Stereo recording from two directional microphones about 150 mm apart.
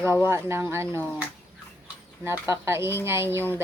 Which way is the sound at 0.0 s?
15° right (ahead or behind).